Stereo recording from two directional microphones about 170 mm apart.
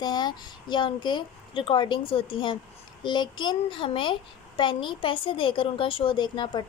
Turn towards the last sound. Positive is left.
turn(degrees=30)  # may be behind; listen again after turning